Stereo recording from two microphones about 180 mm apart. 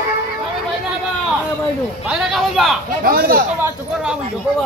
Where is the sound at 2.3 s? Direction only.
Centre (ahead or behind).